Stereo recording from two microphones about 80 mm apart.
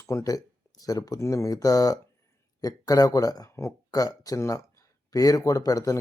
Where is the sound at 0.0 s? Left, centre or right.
Left.